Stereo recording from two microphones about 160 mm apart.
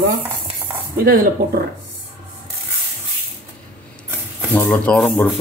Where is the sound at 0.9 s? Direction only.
70° right (ahead or behind).